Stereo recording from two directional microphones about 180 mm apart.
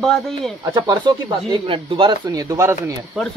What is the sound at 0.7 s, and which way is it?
Speech, 25° right (ahead or behind).